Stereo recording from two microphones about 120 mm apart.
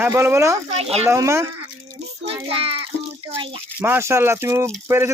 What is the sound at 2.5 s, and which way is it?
Speech, 55° right (ahead or behind).